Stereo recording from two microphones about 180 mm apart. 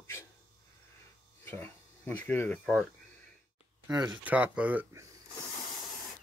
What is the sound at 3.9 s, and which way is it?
Speech, 10° right (ahead or behind).